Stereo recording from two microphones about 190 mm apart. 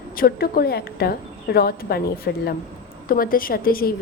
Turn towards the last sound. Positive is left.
turn(degrees=50)  # may be behind; listen again after turning